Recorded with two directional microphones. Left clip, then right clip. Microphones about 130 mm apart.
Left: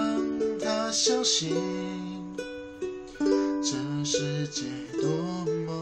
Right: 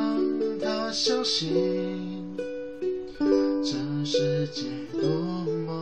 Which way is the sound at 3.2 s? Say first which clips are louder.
Right 2 dB; 30° left (ahead or behind).